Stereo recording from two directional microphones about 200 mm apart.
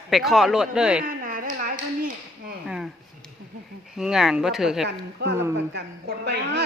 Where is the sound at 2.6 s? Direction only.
Centre (ahead or behind).